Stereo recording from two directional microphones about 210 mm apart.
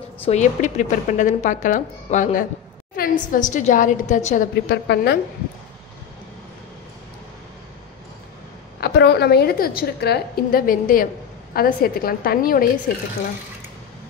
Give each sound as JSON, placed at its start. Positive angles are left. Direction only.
{"t": 0.2, "sound": "speech", "side_deg": 35}
{"t": 4.6, "sound": "a woman's voice", "side_deg": 50}
{"t": 8.8, "sound": "a woman's voice", "side_deg": 50}